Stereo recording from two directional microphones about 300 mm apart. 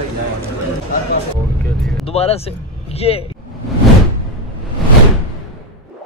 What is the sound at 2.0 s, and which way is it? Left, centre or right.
Speech, centre.